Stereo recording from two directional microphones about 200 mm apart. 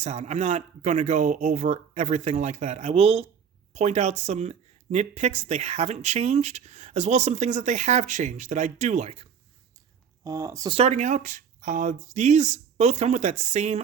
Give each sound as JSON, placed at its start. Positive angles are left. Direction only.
{"t": 0.0, "sound": "speech", "side_deg": -35}
{"t": 10.2, "sound": "speech", "side_deg": -15}
{"t": 10.8, "sound": "speech", "side_deg": -35}